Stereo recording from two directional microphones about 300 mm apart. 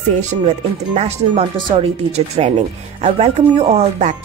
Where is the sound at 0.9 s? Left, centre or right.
Right.